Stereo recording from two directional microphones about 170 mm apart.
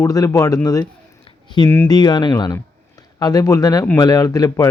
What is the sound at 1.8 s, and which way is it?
A man's voice, 25° left (ahead or behind).